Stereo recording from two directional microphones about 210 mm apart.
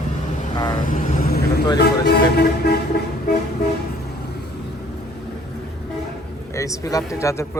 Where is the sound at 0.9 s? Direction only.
40° left (ahead or behind).